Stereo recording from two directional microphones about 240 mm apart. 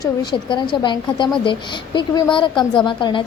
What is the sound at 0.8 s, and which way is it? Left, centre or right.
A woman's voice, centre.